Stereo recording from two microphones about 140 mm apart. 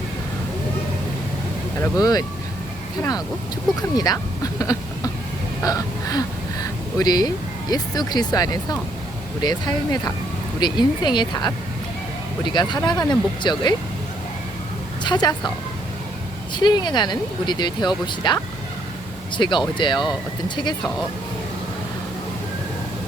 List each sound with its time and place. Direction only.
1.8 s speech: 25° left (ahead or behind)
3.8 s speech: 30° left (ahead or behind)
4.6 s a sound: 25° left (ahead or behind)
5.6 s speech: 25° left (ahead or behind)
12.5 s speech: 30° left (ahead or behind)
15.0 s speech: 30° left (ahead or behind)
16.6 s speech: 30° left (ahead or behind)